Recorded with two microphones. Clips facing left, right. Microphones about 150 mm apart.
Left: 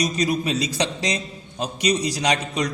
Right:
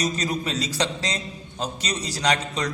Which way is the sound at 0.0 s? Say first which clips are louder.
Left 4 dB; 15° left (ahead or behind).